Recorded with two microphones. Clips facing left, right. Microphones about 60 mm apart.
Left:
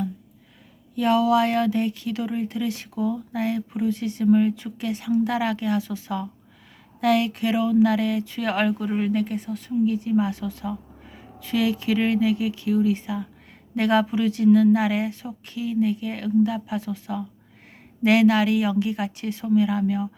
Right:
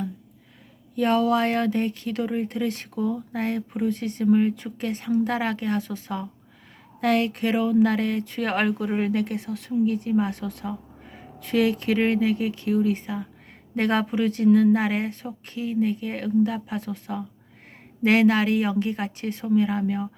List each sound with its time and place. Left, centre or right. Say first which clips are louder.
0.9 s speech: left 2 dB; right